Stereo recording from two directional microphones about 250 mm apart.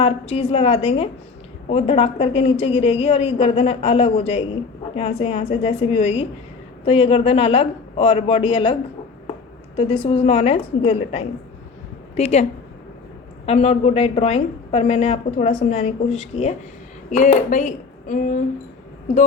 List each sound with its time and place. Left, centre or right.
0.0 s a woman's voice: left